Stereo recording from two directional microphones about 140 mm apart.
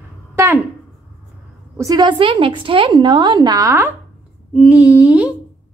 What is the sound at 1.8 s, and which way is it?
A woman's voice, 30° right (ahead or behind).